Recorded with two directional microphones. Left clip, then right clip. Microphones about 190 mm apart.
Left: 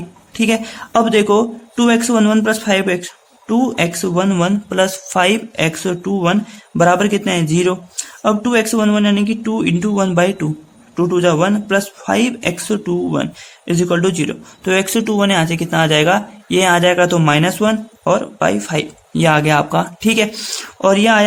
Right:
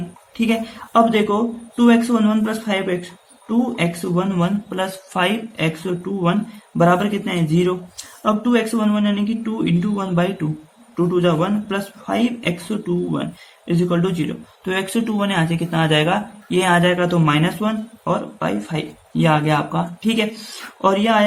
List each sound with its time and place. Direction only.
0.3 s a man's voice: 45° left (ahead or behind)